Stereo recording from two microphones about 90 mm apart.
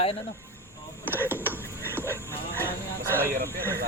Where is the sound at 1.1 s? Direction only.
25° right (ahead or behind).